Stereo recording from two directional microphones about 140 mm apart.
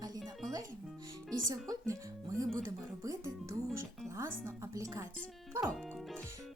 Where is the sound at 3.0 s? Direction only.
25° right (ahead or behind).